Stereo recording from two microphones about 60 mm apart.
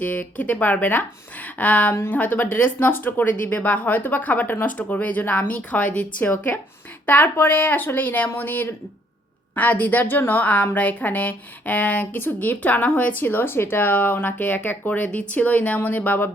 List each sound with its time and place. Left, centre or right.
0.0 s a woman's voice: left